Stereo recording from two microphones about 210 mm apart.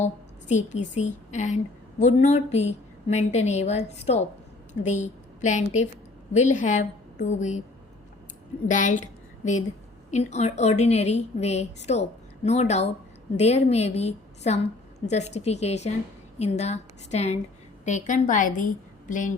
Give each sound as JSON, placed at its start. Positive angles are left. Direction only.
{"t": 0.0, "sound": "a sound", "side_deg": 35}
{"t": 0.9, "sound": "a woman's voice", "side_deg": 35}
{"t": 8.6, "sound": "a woman's voice", "side_deg": 35}